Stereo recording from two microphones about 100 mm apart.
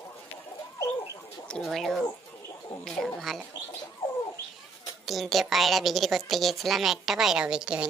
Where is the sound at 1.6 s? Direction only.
Centre (ahead or behind).